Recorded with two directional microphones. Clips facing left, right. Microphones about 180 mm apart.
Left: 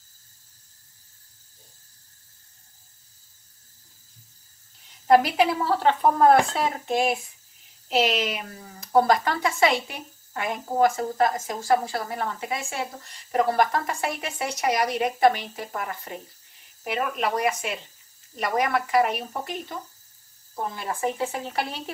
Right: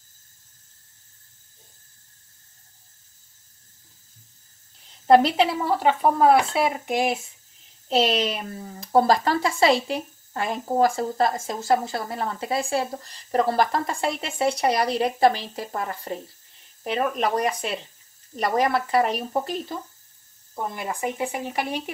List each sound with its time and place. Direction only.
5.0 s speech: 30° right (ahead or behind)
5.8 s speech: 5° right (ahead or behind)
7.9 s speech: 30° right (ahead or behind)
17.1 s speech: 35° right (ahead or behind)
19.0 s speech: 10° left (ahead or behind)
20.7 s speech: 15° right (ahead or behind)